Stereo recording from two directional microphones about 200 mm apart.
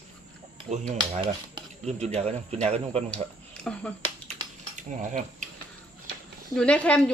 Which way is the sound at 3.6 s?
5° left (ahead or behind).